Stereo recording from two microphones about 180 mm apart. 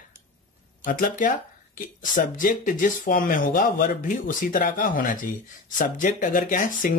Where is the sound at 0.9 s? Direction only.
50° left (ahead or behind).